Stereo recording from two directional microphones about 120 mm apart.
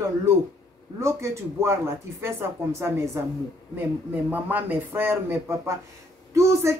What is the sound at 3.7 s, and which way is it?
A man's voice, 15° right (ahead or behind).